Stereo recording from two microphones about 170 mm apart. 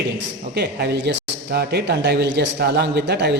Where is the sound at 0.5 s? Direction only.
75° right (ahead or behind).